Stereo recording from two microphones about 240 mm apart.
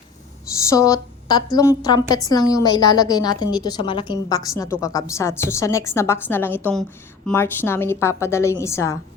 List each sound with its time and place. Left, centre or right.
0.7 s a woman's voice: centre